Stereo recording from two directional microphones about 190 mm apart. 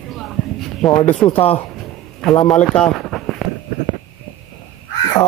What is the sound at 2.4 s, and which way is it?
Speech, 5° left (ahead or behind).